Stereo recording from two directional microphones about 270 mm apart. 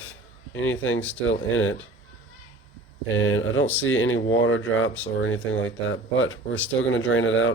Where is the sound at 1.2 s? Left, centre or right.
Left.